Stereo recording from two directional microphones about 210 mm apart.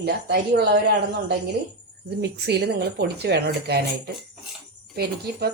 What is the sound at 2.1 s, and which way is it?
Speech, 55° right (ahead or behind).